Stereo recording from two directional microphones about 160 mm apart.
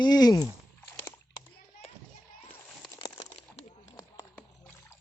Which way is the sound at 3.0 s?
30° left (ahead or behind).